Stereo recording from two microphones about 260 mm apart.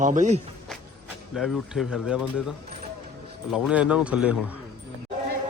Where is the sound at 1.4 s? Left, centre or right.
Centre.